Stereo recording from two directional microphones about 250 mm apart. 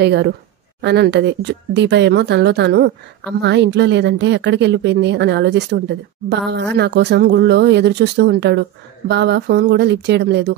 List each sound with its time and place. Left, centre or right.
0.0 s speech: right